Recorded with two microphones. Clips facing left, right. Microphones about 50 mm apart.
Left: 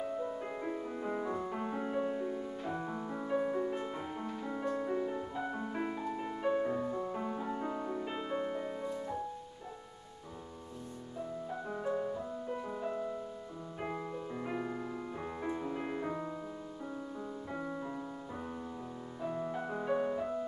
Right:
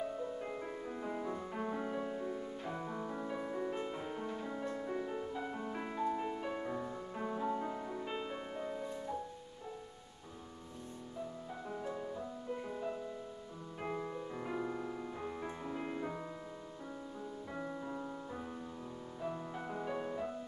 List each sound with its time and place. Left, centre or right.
0.2 s music: centre
4.9 s music: centre
6.3 s music: centre
11.7 s music: centre
14.5 s music: left
14.8 s music: centre
17.6 s music: centre
19.2 s music: centre